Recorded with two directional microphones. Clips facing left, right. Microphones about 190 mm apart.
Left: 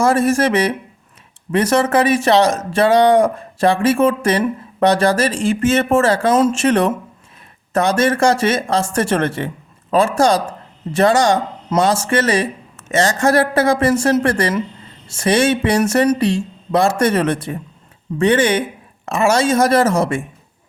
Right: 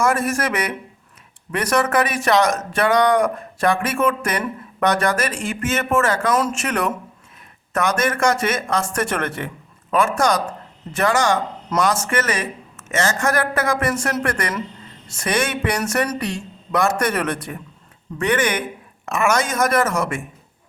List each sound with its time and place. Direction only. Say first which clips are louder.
0.0 s speech: left 6 dB; 30° left (ahead or behind)